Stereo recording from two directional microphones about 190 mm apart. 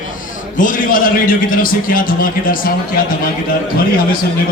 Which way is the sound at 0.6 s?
45° left (ahead or behind).